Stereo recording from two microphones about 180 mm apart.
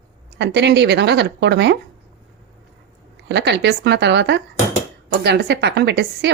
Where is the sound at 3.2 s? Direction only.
75° right (ahead or behind).